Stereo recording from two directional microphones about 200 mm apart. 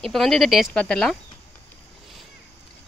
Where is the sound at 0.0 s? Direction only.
Centre (ahead or behind).